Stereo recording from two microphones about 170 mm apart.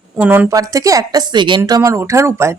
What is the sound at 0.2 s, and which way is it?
A woman's voice, 10° right (ahead or behind).